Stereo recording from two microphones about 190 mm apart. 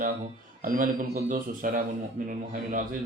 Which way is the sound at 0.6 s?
45° right (ahead or behind).